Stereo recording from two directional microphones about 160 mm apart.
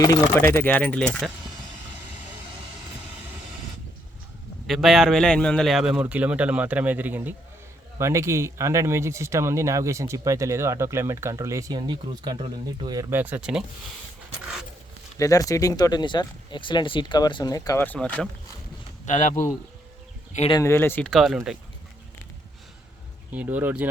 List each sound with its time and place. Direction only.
0.0 s speech: 20° left (ahead or behind)
4.6 s a man's voice: centre (ahead or behind); by 13.1 s 30° right (ahead or behind)
13.1 s speech: 10° right (ahead or behind)
15.2 s speech: 20° left (ahead or behind)
17.8 s speech: 10° left (ahead or behind)
19.0 s speech: 50° left (ahead or behind)
20.5 s speech: 20° left (ahead or behind); by 21.6 s 5° right (ahead or behind)
23.3 s speech: 10° right (ahead or behind)